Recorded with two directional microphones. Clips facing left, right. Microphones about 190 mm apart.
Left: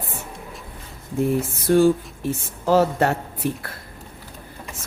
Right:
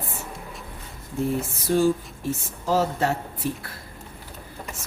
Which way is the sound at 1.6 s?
60° left (ahead or behind).